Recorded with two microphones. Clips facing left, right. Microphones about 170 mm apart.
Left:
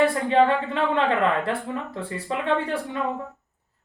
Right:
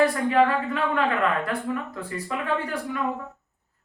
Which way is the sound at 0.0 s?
25° left (ahead or behind).